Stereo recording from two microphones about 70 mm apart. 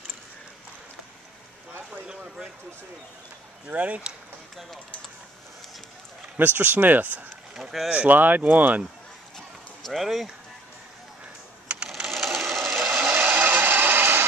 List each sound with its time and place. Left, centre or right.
1.9 s a sound: centre
3.6 s speech: centre
6.3 s speech: right
7.5 s speech: centre
7.9 s speech: right
9.8 s speech: centre
11.6 s sewing machine: centre
12.1 s ratchet: centre
13.1 s a sound: right